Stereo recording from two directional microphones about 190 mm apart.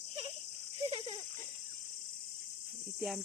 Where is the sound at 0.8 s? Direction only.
30° right (ahead or behind).